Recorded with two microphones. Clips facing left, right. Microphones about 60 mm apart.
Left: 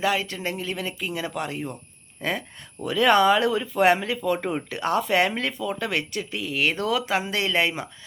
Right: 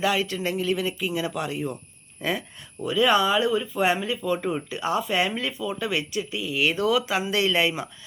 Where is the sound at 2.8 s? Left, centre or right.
Left.